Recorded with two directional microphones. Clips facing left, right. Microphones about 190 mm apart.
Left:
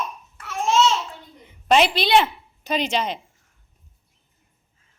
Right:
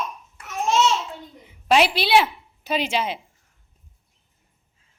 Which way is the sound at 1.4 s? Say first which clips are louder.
Left 1 dB; 5° right (ahead or behind).